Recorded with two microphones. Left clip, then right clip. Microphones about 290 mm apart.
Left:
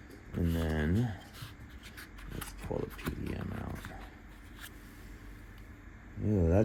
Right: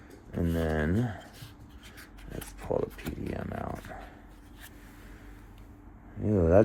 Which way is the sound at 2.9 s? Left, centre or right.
Centre.